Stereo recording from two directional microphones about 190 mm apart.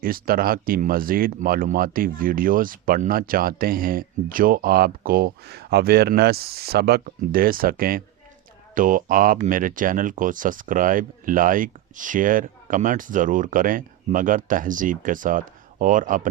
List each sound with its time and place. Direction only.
0.0 s speech: 50° right (ahead or behind)